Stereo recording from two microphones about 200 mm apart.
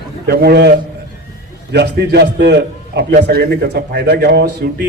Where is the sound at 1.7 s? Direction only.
55° right (ahead or behind).